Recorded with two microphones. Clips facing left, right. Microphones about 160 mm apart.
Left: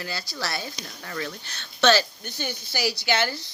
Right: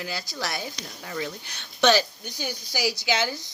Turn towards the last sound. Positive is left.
turn(degrees=-15)  # may be behind; listen again after turning